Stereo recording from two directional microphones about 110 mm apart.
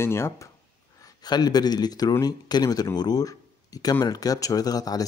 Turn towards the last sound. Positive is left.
turn(degrees=35)  # may be behind; listen again after turning